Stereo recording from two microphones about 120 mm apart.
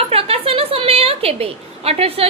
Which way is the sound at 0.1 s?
55° right (ahead or behind).